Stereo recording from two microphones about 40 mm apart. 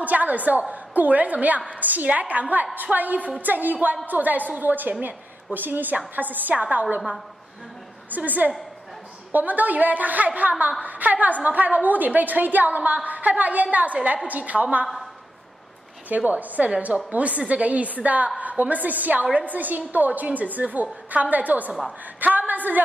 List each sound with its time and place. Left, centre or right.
0.0 s a woman's voice: right
8.1 s a woman's voice: right
16.3 s a woman's voice: right